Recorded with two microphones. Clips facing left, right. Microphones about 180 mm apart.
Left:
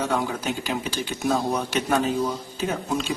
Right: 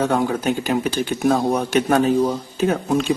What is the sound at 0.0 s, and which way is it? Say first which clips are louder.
Speech: right 6 dB; 55° right (ahead or behind).